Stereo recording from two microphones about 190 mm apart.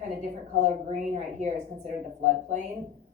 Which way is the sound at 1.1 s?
40° right (ahead or behind).